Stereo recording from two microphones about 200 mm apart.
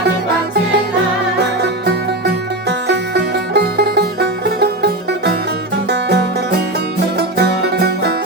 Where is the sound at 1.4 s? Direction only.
55° right (ahead or behind).